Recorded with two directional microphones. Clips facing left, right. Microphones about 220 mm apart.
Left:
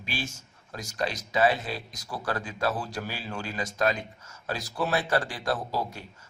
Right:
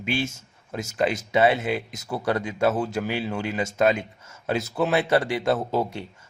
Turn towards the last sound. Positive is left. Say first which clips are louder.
# right 7 dB
turn(degrees=-25)  # may be behind; listen again after turning